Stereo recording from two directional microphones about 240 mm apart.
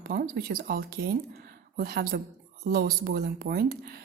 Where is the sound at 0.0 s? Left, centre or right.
Right.